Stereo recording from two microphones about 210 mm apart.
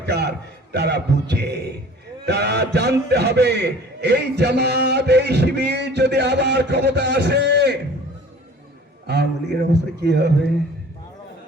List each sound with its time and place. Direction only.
0.0 s a man's voice: 50° right (ahead or behind)
9.0 s a man's voice: 50° right (ahead or behind)